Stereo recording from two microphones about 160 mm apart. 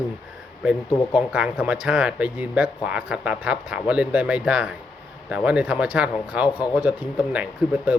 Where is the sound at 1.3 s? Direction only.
5° right (ahead or behind).